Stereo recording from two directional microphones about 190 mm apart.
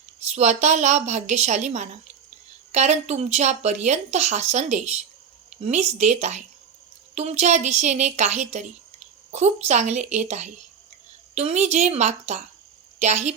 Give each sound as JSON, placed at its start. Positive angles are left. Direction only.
{"t": 0.2, "sound": "a woman's voice", "side_deg": -35}